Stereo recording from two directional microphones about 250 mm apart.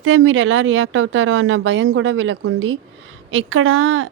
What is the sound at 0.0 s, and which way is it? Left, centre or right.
Speech, right.